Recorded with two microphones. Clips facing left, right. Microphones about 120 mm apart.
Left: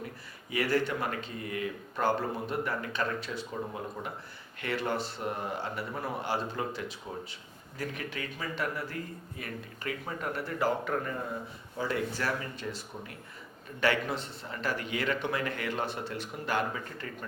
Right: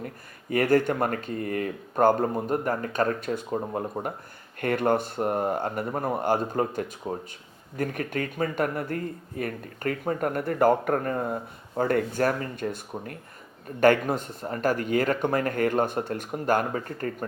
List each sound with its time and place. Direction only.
0.5 s speech: 50° right (ahead or behind)